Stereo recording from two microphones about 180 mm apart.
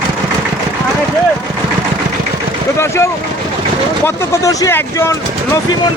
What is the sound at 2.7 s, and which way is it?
Speech, 15° left (ahead or behind).